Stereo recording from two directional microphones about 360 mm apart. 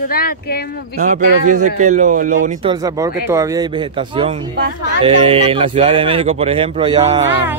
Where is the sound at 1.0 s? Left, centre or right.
Right.